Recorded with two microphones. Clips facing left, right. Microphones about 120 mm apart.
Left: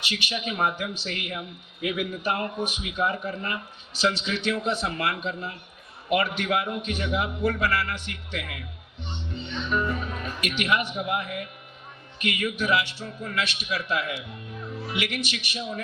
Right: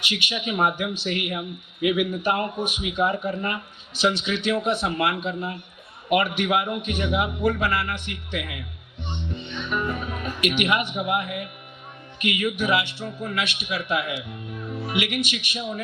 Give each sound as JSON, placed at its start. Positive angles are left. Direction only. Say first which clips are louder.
{"t": 0.1, "sound": "a man's voice", "louder": "right 3 dB", "side_deg": -15}